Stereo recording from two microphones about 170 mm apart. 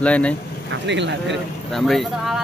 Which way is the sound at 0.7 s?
90° right.